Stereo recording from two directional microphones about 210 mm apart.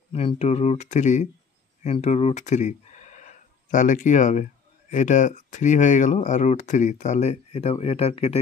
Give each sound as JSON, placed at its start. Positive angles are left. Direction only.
{"t": 0.1, "sound": "speech", "side_deg": 30}